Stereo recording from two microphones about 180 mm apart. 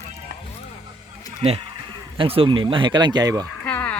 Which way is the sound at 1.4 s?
30° right (ahead or behind).